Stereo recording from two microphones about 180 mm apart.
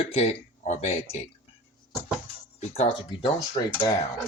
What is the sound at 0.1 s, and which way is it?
Speech, 35° left (ahead or behind).